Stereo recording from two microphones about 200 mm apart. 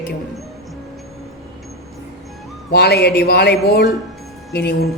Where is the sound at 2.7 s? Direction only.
55° left (ahead or behind).